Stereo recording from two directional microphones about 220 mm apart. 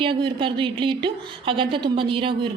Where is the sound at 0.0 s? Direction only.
25° right (ahead or behind).